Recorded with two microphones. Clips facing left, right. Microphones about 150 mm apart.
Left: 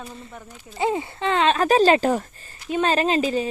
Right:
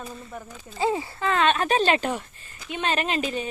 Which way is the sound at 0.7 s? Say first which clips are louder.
Left 2 dB; 20° left (ahead or behind).